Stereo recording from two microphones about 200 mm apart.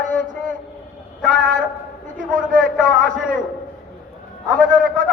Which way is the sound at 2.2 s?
40° right (ahead or behind).